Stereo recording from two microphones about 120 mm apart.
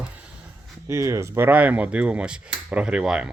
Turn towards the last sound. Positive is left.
turn(degrees=-10)  # may be behind; listen again after turning